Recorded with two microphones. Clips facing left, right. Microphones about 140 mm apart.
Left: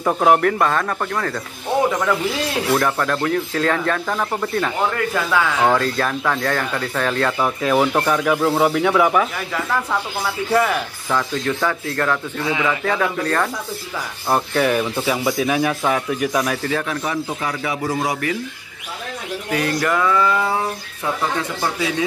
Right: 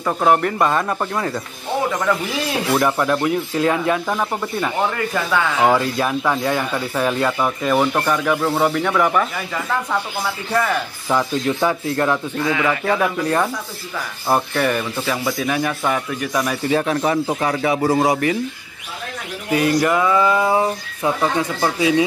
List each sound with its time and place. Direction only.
0.0 s speech: 10° left (ahead or behind)
0.4 s speech: 5° right (ahead or behind)
2.7 s speech: 10° right (ahead or behind)
5.6 s speech: 10° right (ahead or behind)
7.3 s speech: centre (ahead or behind)
11.1 s speech: 15° right (ahead or behind)
14.3 s speech: centre (ahead or behind)
16.6 s speech: 30° right (ahead or behind)
19.5 s speech: 10° right (ahead or behind)